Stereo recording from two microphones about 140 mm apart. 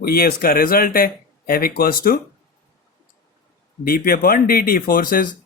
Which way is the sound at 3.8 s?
90° left.